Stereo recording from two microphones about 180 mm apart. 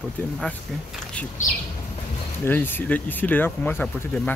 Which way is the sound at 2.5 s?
10° left (ahead or behind).